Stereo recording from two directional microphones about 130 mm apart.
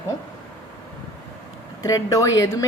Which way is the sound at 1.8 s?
25° left (ahead or behind).